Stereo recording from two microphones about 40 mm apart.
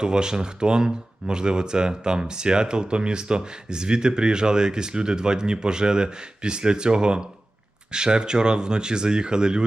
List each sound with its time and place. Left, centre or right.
0.0 s speech: centre